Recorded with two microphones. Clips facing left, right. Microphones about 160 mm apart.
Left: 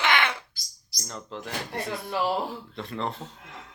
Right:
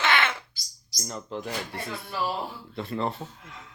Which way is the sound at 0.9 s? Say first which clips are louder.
Right 3 dB; 5° right (ahead or behind).